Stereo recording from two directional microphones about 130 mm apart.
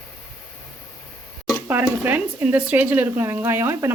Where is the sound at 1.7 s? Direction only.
15° right (ahead or behind).